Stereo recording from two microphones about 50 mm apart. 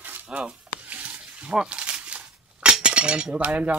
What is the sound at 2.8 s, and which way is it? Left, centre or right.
Cutlery, centre.